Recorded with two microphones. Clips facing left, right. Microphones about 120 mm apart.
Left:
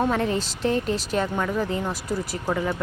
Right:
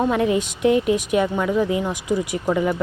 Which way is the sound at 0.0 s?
15° right (ahead or behind).